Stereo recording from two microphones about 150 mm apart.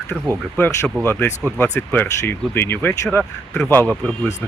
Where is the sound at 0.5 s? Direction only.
15° left (ahead or behind).